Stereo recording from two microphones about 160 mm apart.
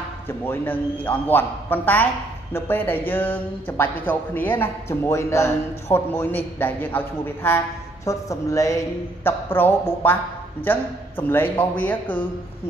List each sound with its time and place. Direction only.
0.3 s a man's voice: 10° left (ahead or behind)